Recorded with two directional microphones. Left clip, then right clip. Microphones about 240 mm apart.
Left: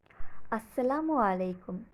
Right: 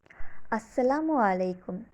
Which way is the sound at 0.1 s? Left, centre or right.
Centre.